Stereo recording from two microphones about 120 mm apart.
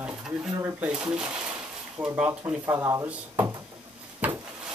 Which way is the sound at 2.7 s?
25° right (ahead or behind).